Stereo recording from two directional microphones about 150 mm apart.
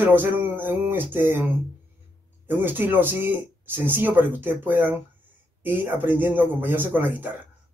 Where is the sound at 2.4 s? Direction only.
15° right (ahead or behind).